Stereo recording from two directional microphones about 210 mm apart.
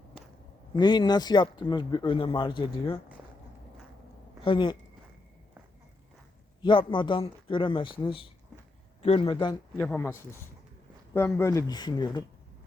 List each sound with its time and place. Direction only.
0.7 s speech: 20° left (ahead or behind)
4.4 s speech: 25° left (ahead or behind)
6.6 s speech: 20° left (ahead or behind)
9.7 s speech: 10° left (ahead or behind)